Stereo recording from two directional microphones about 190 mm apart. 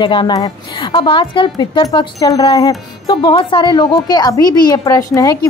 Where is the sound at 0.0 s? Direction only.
25° left (ahead or behind).